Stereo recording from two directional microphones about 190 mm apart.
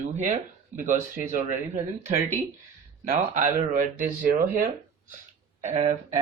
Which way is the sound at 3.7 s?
45° right (ahead or behind).